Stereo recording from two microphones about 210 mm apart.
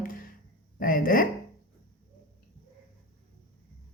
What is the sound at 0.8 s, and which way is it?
Speech, 40° left (ahead or behind).